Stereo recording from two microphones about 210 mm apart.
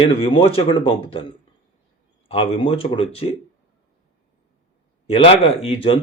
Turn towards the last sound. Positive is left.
turn(degrees=25)  # may be behind; listen again after turning